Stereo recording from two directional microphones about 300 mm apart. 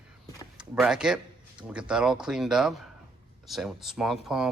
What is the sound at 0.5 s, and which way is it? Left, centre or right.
Speech, centre.